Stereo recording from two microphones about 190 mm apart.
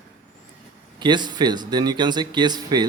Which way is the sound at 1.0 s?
25° right (ahead or behind).